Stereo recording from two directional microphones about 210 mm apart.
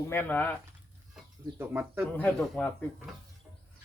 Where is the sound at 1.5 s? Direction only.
10° right (ahead or behind).